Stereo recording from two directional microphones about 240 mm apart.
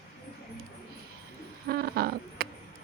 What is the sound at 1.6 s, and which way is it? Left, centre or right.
Owl, right.